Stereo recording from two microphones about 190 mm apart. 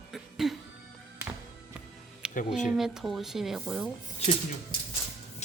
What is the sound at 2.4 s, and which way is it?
Speech, 40° left (ahead or behind).